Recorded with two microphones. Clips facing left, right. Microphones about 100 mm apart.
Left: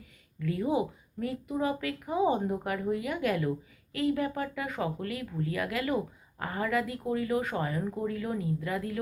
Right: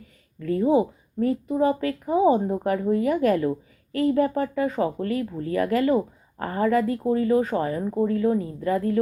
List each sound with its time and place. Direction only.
0.0 s a woman's voice: 40° right (ahead or behind)